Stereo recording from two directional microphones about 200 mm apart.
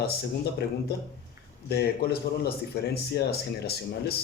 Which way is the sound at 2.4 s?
55° left (ahead or behind).